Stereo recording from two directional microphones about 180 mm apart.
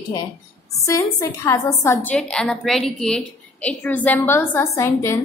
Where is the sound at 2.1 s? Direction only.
5° left (ahead or behind).